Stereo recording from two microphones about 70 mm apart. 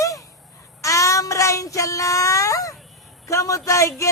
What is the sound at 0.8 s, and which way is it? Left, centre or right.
Child singing, left.